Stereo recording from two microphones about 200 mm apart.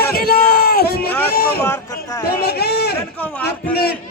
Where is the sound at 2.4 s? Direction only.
50° left (ahead or behind).